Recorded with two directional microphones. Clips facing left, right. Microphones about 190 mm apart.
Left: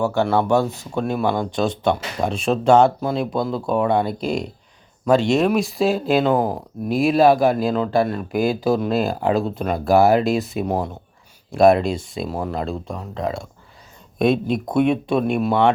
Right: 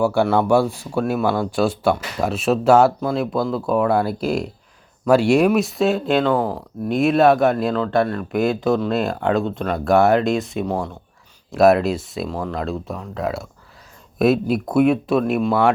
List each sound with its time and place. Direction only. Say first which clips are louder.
0.0 s speech: right 2 dB; 10° right (ahead or behind)
6.3 s speech: left 1 dB; 15° left (ahead or behind)
6.8 s speech: even; centre (ahead or behind)
10.7 s speech: left 2 dB; 15° left (ahead or behind)
11.5 s speech: even; centre (ahead or behind)